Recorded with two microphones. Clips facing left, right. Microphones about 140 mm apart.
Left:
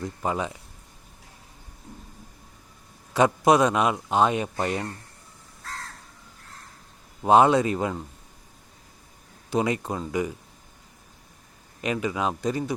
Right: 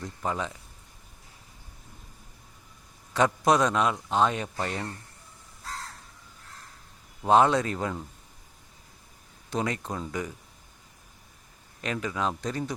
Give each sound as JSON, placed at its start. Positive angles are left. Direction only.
{"t": 0.2, "sound": "a man's voice", "side_deg": 10}
{"t": 3.1, "sound": "a man's voice", "side_deg": 10}
{"t": 4.4, "sound": "speech", "side_deg": 25}
{"t": 7.3, "sound": "a man's voice", "side_deg": 10}
{"t": 9.5, "sound": "a man's voice", "side_deg": 10}
{"t": 11.8, "sound": "a man's voice", "side_deg": 10}